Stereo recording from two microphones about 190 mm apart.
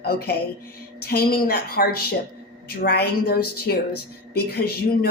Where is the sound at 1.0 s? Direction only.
55° left (ahead or behind).